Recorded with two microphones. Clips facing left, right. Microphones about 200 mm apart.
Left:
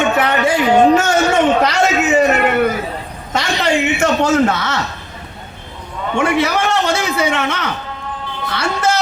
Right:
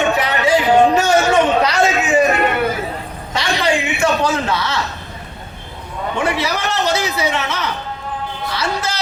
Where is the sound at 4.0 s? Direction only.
45° left (ahead or behind).